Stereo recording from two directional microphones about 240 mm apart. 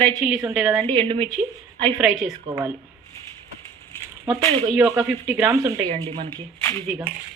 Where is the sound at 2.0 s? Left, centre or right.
Centre.